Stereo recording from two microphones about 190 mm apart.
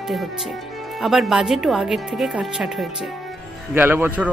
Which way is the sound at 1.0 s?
Centre (ahead or behind).